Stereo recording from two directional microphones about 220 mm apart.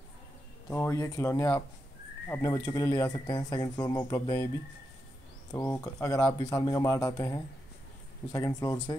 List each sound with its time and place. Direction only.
0.7 s speech: 10° left (ahead or behind)
5.5 s speech: 15° left (ahead or behind)